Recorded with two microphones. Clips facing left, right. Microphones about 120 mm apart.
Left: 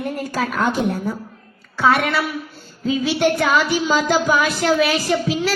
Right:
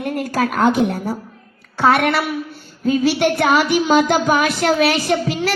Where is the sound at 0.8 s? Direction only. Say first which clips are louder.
Right 2 dB; 70° right (ahead or behind).